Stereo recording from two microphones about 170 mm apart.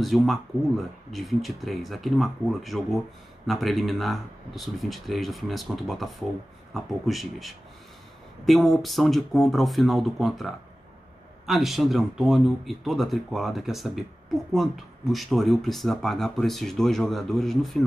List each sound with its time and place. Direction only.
0.0 s speech: centre (ahead or behind)